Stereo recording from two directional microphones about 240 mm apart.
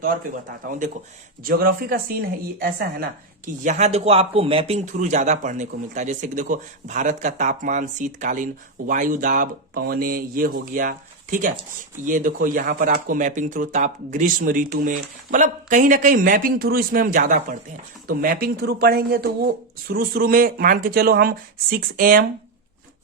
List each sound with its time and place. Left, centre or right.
0.0 s speech: right